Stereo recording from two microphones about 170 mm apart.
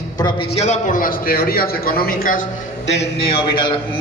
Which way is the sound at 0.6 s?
45° left (ahead or behind).